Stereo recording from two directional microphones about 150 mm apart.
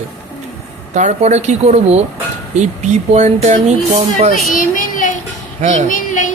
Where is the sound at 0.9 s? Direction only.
50° right (ahead or behind).